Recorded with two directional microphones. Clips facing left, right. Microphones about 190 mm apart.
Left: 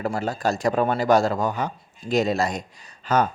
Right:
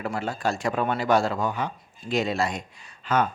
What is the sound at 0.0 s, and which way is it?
Speech, 40° left (ahead or behind).